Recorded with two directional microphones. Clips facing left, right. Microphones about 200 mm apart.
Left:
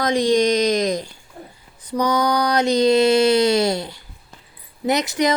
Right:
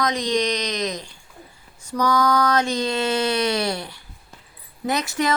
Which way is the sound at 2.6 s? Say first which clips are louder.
Left 8 dB; 40° left (ahead or behind).